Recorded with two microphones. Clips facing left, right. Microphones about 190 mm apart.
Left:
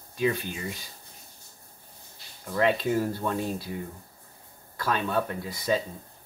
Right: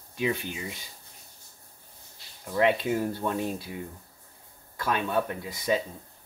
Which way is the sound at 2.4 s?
15° right (ahead or behind).